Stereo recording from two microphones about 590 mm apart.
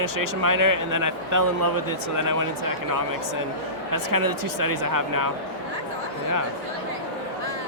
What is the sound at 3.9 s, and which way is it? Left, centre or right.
Speech, right.